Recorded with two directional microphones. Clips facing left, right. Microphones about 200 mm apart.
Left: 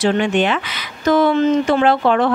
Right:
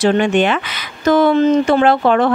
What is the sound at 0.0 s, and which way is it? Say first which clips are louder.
Speech: right 3 dB; 50° right (ahead or behind).